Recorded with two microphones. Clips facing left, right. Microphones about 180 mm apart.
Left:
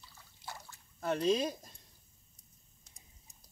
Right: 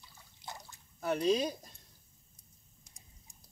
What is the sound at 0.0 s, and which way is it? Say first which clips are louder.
Drip: even; 15° right (ahead or behind).